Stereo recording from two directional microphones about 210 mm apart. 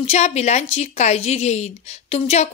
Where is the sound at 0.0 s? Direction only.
30° left (ahead or behind).